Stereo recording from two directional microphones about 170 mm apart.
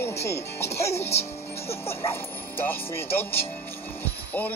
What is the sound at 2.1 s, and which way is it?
Speech, 15° left (ahead or behind).